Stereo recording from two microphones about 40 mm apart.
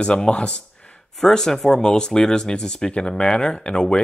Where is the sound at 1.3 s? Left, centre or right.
Centre.